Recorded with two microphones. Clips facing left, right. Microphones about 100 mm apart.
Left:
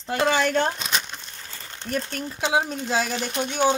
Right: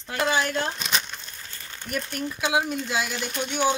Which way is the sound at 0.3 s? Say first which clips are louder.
Left 4 dB; 60° left (ahead or behind).